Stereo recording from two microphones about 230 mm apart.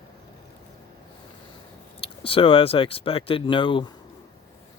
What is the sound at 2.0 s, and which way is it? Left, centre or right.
Speech, left.